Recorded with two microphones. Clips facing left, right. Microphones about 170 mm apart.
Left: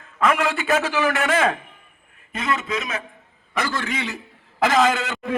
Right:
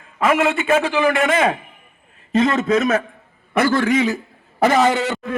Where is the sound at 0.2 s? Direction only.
5° right (ahead or behind).